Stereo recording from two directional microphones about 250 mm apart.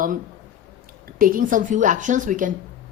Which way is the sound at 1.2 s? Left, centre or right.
Right.